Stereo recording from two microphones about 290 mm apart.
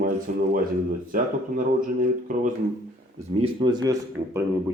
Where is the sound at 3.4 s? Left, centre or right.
Centre.